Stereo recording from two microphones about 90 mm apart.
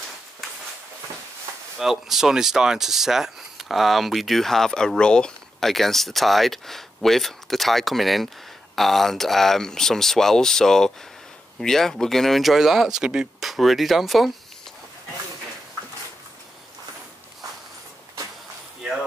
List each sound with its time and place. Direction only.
1.8 s speech: 5° right (ahead or behind)